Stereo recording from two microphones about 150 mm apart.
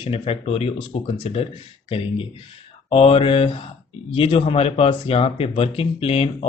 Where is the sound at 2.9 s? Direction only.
40° left (ahead or behind).